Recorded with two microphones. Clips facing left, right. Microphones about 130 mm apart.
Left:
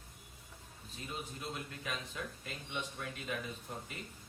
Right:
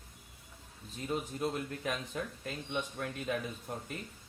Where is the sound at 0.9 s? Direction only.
45° right (ahead or behind).